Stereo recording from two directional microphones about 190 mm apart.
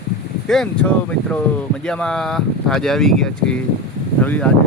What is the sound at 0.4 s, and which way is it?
Speech, 5° left (ahead or behind).